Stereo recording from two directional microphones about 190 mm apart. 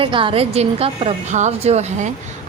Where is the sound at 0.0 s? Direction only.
25° right (ahead or behind).